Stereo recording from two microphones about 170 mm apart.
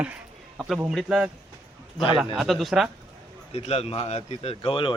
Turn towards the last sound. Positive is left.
turn(degrees=30)  # may be behind; listen again after turning